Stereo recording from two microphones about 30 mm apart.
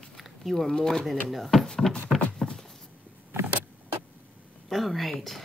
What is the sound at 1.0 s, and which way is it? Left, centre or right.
Speech, centre.